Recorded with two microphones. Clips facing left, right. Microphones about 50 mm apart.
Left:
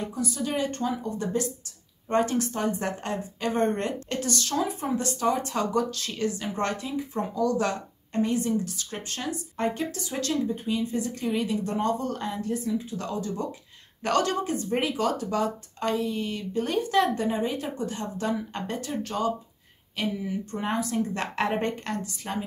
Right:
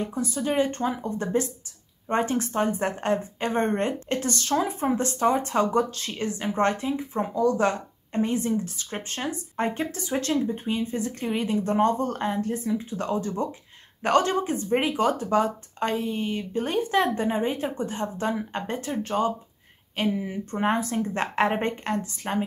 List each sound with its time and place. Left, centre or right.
0.1 s a woman's voice: right
22.1 s speech: right